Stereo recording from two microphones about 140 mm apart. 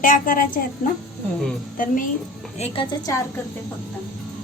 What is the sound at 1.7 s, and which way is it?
Speech, 75° left (ahead or behind).